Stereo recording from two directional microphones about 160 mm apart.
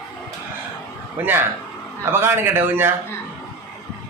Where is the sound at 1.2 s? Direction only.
10° right (ahead or behind).